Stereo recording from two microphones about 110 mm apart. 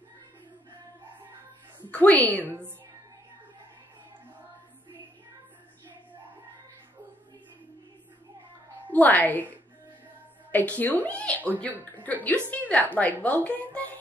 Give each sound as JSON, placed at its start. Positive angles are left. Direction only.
{"t": 1.9, "sound": "speech", "side_deg": 15}
{"t": 2.4, "sound": "a woman's voice", "side_deg": -20}
{"t": 8.9, "sound": "a woman's voice", "side_deg": 15}